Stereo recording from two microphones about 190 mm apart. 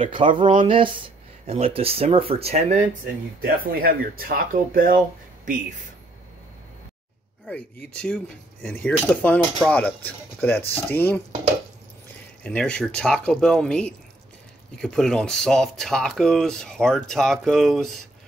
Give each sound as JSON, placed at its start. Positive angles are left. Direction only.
{"t": 0.0, "sound": "speech", "side_deg": -25}
{"t": 7.4, "sound": "speech", "side_deg": 5}
{"t": 12.4, "sound": "speech", "side_deg": 5}